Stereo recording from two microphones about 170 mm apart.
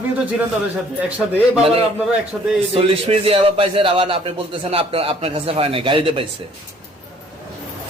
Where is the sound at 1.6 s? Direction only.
35° right (ahead or behind).